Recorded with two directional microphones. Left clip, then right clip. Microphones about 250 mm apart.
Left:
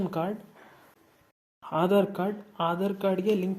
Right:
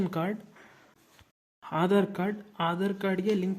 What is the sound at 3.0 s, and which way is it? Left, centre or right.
Speech, centre.